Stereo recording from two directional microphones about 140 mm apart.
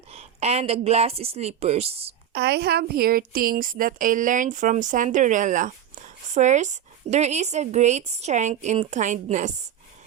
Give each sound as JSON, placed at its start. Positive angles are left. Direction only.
{"t": 0.1, "sound": "speech", "side_deg": -50}
{"t": 2.9, "sound": "a woman's voice", "side_deg": -90}